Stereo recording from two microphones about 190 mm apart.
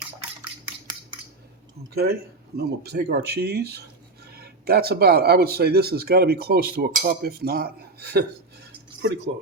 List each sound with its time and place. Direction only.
1.9 s speech: 55° right (ahead or behind)